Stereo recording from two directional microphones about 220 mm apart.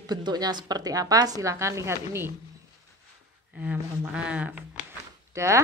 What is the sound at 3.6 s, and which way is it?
Speech, 5° right (ahead or behind).